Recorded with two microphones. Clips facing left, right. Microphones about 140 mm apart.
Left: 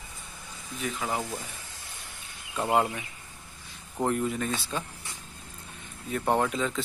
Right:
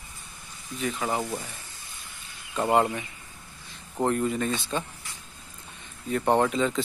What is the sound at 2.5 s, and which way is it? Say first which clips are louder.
Speech: right 3 dB; centre (ahead or behind).